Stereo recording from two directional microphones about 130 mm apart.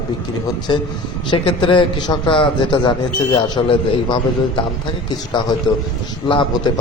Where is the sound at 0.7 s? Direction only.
35° left (ahead or behind).